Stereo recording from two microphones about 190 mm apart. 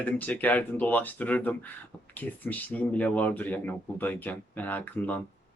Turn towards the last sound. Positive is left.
turn(degrees=10)  # may be behind; listen again after turning